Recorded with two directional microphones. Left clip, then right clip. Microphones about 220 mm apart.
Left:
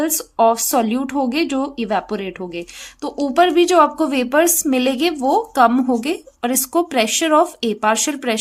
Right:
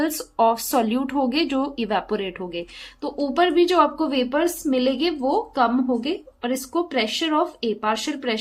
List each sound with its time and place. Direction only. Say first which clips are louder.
0.0 s a woman's voice: left 4 dB; 20° left (ahead or behind)